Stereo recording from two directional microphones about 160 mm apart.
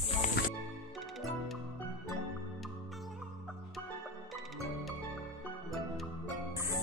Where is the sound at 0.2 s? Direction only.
50° left (ahead or behind).